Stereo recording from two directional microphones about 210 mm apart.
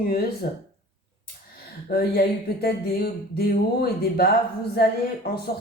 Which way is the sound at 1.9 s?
45° left (ahead or behind).